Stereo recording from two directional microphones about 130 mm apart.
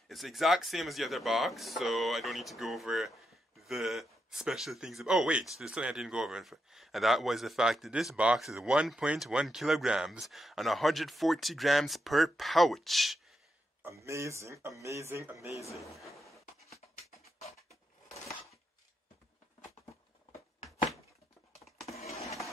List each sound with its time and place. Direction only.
0.1 s speech: centre (ahead or behind)
13.8 s speech: 20° right (ahead or behind)
17.2 s a sound: 55° left (ahead or behind)